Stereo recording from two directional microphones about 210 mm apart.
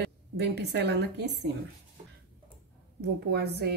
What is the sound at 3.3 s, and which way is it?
Speech, 50° right (ahead or behind).